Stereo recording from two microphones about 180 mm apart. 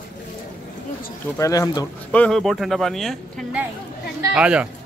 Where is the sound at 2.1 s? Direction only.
5° left (ahead or behind).